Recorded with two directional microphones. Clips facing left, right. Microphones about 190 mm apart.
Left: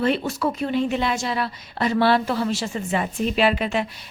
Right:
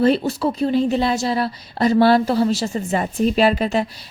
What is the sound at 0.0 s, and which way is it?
A woman's voice, 35° right (ahead or behind).